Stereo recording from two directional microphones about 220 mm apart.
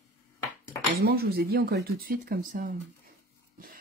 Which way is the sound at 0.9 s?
45° right (ahead or behind).